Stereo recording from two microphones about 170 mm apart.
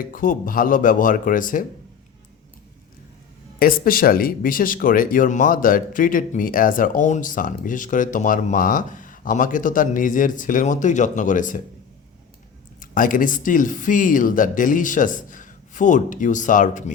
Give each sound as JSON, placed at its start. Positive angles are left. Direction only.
{"t": 0.1, "sound": "speech", "side_deg": 55}
{"t": 3.6, "sound": "speech", "side_deg": 55}
{"t": 12.8, "sound": "speech", "side_deg": 50}